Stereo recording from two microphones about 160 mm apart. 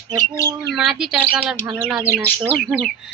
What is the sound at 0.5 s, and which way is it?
A woman's voice, 5° right (ahead or behind).